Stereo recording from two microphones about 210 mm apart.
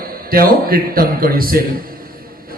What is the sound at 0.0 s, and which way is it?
A man's voice, 45° right (ahead or behind).